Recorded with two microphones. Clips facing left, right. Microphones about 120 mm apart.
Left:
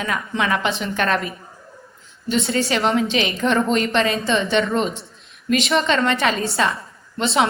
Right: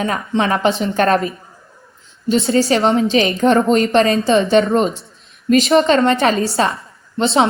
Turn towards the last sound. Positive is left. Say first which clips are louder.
# right 4 dB
turn(degrees=-30)  # may be behind; listen again after turning